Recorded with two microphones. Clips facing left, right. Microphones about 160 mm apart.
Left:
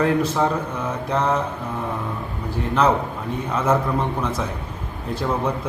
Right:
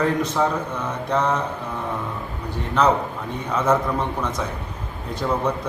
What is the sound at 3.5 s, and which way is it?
A man's voice, 5° left (ahead or behind).